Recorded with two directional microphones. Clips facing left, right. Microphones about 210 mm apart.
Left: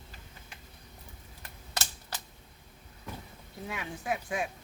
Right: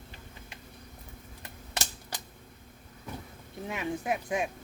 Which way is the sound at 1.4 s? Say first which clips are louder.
Right 1 dB; 15° right (ahead or behind).